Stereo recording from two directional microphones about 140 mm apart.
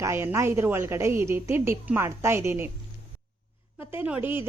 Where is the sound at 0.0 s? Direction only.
15° right (ahead or behind).